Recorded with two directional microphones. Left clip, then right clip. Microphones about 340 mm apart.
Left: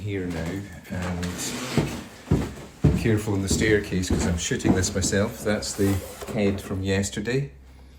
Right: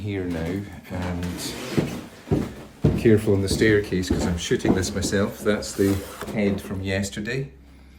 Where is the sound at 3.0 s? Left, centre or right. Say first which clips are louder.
Right 11 dB; centre.